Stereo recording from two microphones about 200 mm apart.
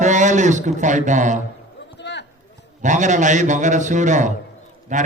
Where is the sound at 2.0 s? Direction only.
60° left (ahead or behind).